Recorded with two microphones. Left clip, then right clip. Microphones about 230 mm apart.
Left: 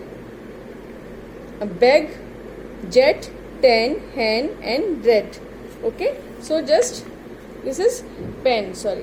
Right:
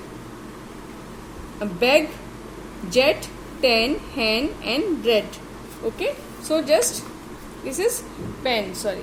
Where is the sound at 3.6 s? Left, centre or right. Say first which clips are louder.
Left 4 dB; centre.